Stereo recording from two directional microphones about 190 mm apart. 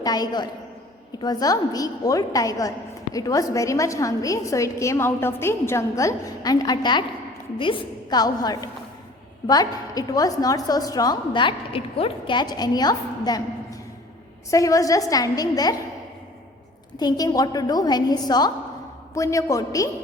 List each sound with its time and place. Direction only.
0.0 s a woman's voice: 20° left (ahead or behind)
17.0 s a woman's voice: 20° left (ahead or behind)